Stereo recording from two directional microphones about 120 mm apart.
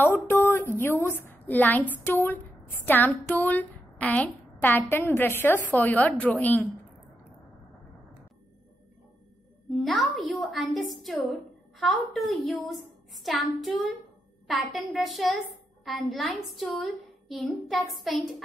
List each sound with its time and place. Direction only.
0.0 s a woman's voice: 15° left (ahead or behind)
9.7 s a woman's voice: centre (ahead or behind)